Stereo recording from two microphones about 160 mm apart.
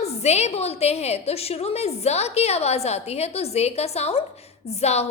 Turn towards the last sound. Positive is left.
turn(degrees=40)  # may be behind; listen again after turning